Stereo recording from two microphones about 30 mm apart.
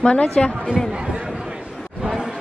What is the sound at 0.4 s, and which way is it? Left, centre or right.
Speech, left.